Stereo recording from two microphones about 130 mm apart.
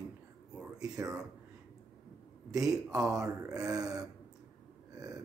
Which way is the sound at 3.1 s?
25° right (ahead or behind).